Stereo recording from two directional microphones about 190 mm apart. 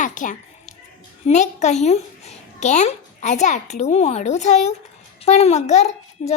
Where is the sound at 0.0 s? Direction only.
40° left (ahead or behind).